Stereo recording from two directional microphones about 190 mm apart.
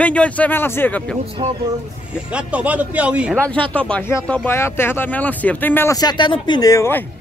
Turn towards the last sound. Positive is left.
turn(degrees=15)  # may be behind; listen again after turning